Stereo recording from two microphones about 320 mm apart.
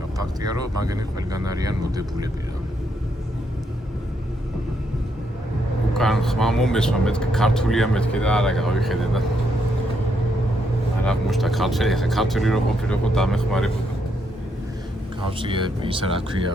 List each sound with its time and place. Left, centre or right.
0.9 s speech: centre
5.9 s speech: centre
11.0 s speech: centre
15.3 s speech: centre